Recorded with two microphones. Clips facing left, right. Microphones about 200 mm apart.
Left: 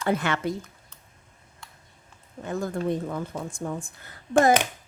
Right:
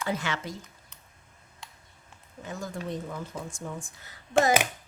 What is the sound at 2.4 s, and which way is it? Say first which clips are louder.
A woman's voice: left 8 dB; 55° left (ahead or behind).